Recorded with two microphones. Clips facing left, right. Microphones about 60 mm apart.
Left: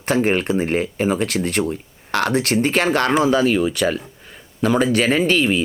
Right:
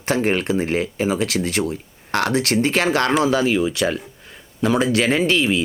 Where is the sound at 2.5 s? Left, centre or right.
Centre.